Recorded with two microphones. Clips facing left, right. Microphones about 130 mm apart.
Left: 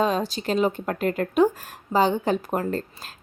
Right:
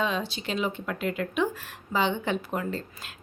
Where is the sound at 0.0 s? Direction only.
40° left (ahead or behind).